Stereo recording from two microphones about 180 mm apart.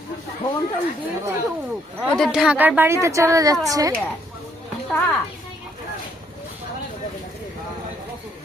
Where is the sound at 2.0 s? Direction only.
Centre (ahead or behind); by 3.9 s 20° right (ahead or behind).